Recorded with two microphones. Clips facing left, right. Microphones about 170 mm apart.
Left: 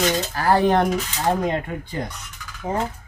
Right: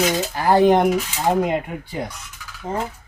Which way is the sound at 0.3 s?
20° right (ahead or behind).